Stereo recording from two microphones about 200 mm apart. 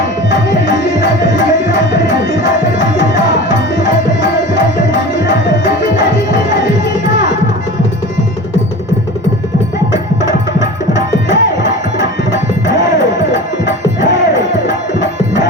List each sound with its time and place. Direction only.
0.3 s tabla: 65° left (ahead or behind)
10.6 s music: 65° left (ahead or behind)
13.3 s music: 65° left (ahead or behind)